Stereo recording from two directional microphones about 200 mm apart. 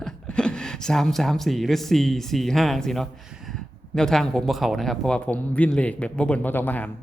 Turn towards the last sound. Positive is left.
turn(degrees=10)  # may be behind; listen again after turning